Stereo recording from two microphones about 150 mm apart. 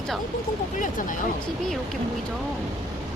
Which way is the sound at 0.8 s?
60° left (ahead or behind).